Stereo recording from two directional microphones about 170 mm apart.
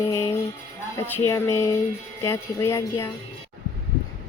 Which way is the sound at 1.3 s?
20° left (ahead or behind).